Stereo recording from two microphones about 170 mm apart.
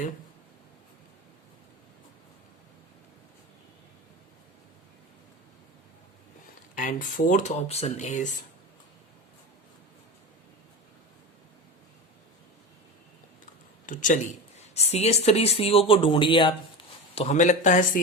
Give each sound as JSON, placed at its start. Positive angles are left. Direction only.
{"t": 6.7, "sound": "speech", "side_deg": 50}
{"t": 13.8, "sound": "speech", "side_deg": 50}
{"t": 14.8, "sound": "speech", "side_deg": 40}